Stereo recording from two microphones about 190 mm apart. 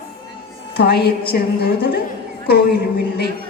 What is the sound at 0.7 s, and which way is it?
A woman's voice, 60° left (ahead or behind).